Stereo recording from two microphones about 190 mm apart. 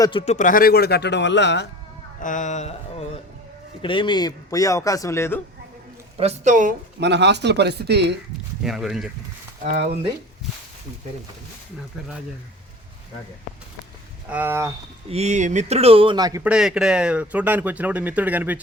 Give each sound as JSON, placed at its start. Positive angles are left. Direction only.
{"t": 0.0, "sound": "speech", "side_deg": 25}
{"t": 0.3, "sound": "a man's voice", "side_deg": 45}
{"t": 2.2, "sound": "speech", "side_deg": 40}
{"t": 3.8, "sound": "a man's voice", "side_deg": 25}
{"t": 6.1, "sound": "speech", "side_deg": -35}
{"t": 7.0, "sound": "speech", "side_deg": -65}
{"t": 8.6, "sound": "speech", "side_deg": 0}
{"t": 9.7, "sound": "speech", "side_deg": -55}
{"t": 14.3, "sound": "speech", "side_deg": -10}
{"t": 15.1, "sound": "speech", "side_deg": -35}
{"t": 16.4, "sound": "speech", "side_deg": -5}